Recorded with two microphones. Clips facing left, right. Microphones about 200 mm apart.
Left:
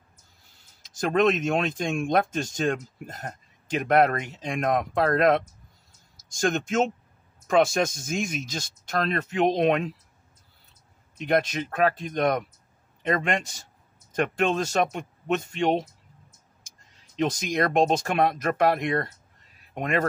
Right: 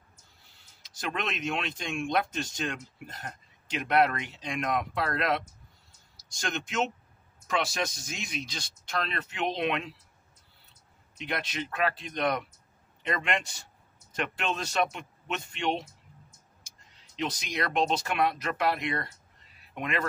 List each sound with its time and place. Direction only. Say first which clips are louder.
0.8 s speech: left 12 dB; 45° left (ahead or behind)
11.1 s speech: left 10 dB; 45° left (ahead or behind)